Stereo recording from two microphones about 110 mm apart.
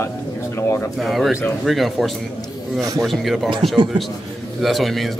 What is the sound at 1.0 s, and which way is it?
A man's voice, centre (ahead or behind).